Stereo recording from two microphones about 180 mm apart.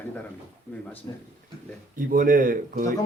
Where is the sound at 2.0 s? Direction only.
50° right (ahead or behind).